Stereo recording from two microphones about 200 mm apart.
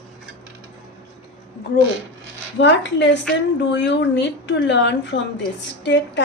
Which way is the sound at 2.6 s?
60° left (ahead or behind).